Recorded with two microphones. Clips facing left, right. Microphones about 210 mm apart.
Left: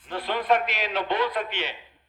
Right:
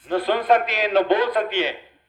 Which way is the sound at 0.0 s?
40° right (ahead or behind).